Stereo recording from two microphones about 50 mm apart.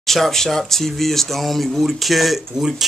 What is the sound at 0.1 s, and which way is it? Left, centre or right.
Speech, centre.